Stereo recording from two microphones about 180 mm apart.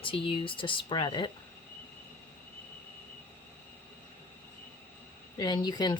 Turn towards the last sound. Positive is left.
turn(degrees=25)  # may be behind; listen again after turning